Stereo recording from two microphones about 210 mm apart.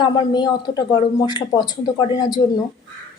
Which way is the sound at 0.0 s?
20° left (ahead or behind).